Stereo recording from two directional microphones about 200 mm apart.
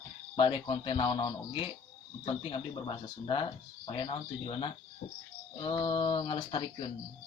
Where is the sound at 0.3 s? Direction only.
25° left (ahead or behind).